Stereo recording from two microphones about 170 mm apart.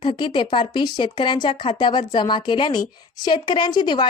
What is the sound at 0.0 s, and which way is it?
Speech, 30° left (ahead or behind).